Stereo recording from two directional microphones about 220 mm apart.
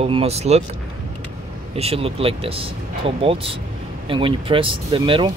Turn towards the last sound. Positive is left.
turn(degrees=-25)  # may be behind; listen again after turning